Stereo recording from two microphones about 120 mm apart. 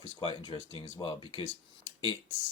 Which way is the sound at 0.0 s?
50° left (ahead or behind).